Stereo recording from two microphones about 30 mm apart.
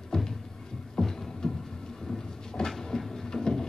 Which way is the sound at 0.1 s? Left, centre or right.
Centre.